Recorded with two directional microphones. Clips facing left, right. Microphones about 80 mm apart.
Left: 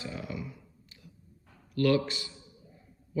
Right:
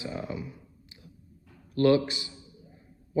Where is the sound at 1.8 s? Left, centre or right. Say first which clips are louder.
Right 4 dB; right.